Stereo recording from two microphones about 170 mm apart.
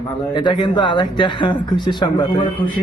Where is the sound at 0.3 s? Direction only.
25° left (ahead or behind).